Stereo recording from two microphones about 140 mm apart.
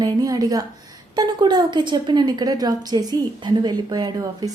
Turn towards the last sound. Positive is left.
turn(degrees=-30)  # may be behind; listen again after turning